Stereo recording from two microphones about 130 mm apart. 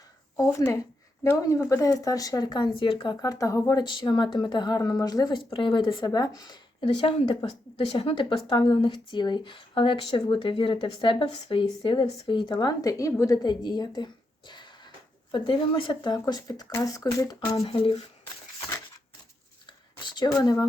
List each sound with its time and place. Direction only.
0.3 s speech: 25° left (ahead or behind)
3.8 s speech: 35° left (ahead or behind)
6.8 s speech: 45° left (ahead or behind); by 17.6 s 25° left (ahead or behind)
17.6 s speech: 50° left (ahead or behind)
19.6 s a sound: 35° left (ahead or behind)
20.3 s speech: 30° left (ahead or behind)